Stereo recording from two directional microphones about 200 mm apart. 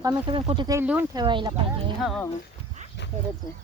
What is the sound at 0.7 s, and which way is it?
Speech, 10° right (ahead or behind).